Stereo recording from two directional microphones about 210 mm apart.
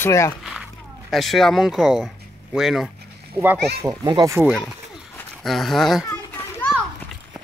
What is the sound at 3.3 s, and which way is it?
Speech, 10° right (ahead or behind).